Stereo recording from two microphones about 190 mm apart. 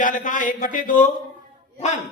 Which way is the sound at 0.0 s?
45° left (ahead or behind).